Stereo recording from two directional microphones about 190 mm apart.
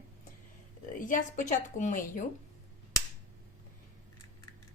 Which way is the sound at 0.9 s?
45° left (ahead or behind).